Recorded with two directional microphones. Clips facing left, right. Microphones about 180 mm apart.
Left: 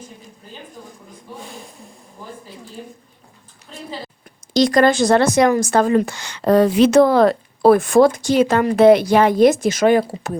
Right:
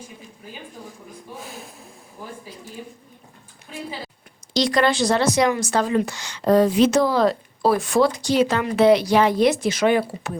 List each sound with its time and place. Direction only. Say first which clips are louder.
1.4 s speech: left 1 dB; 5° right (ahead or behind)
4.5 s speech: left 5 dB; 45° left (ahead or behind)